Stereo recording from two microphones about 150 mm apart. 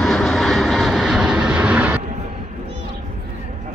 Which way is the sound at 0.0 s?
Centre (ahead or behind).